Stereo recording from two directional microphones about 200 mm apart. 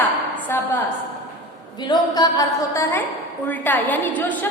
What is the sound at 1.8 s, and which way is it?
A woman's voice, 20° left (ahead or behind).